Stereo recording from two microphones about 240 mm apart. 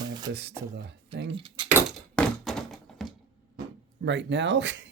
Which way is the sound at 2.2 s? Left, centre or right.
Centre.